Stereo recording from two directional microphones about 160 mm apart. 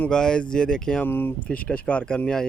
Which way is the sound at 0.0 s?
5° left (ahead or behind).